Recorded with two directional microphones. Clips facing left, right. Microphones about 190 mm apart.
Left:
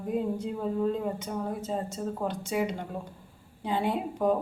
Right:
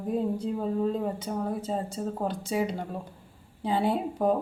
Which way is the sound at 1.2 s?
35° right (ahead or behind).